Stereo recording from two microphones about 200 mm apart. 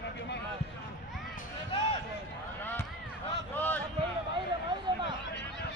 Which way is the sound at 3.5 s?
10° left (ahead or behind).